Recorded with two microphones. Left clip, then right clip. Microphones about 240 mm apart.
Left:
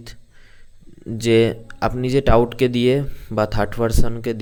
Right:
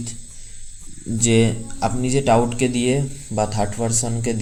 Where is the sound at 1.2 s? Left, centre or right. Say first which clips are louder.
Left 3 dB; left.